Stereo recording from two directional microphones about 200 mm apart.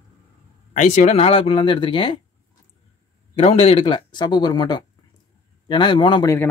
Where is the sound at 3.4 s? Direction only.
30° left (ahead or behind).